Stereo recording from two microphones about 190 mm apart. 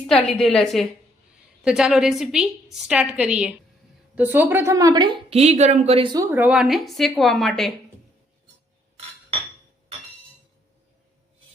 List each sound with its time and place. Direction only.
0.1 s a woman's voice: centre (ahead or behind); by 5.4 s 25° right (ahead or behind)
5.4 s speech: 35° right (ahead or behind)
6.1 s a woman's voice: 10° right (ahead or behind)